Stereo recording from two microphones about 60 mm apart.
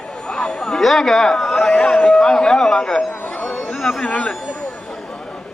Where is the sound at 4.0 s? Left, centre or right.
Centre.